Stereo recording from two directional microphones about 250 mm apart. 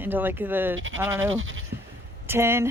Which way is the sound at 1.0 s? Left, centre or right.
Centre.